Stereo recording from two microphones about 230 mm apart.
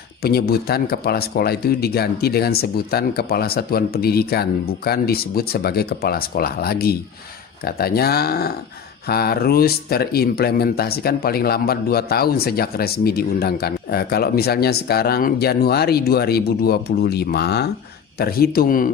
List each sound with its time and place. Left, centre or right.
0.2 s speech: left